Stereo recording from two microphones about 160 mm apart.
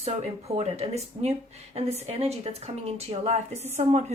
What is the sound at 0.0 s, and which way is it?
Speech, 40° right (ahead or behind).